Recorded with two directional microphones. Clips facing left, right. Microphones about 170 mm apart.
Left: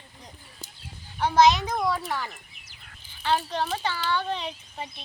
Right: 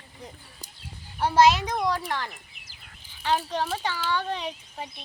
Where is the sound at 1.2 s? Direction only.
5° right (ahead or behind).